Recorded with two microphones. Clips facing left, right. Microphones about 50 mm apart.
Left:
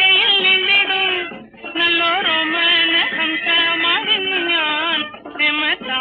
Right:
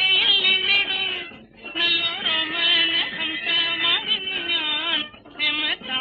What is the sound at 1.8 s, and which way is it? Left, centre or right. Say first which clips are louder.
Music: left 8 dB; left.